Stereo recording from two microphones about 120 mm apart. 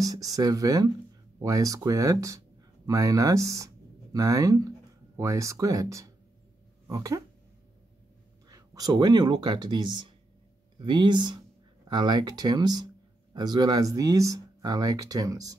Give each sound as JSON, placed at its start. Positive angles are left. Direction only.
{"t": 0.0, "sound": "speech", "side_deg": -30}
{"t": 8.5, "sound": "speech", "side_deg": -30}